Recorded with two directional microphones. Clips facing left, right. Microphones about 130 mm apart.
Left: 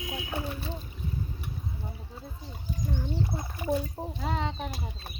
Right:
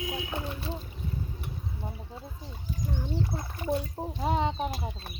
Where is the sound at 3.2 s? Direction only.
15° left (ahead or behind).